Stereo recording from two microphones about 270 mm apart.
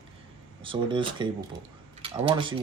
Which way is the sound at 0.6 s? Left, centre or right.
Centre.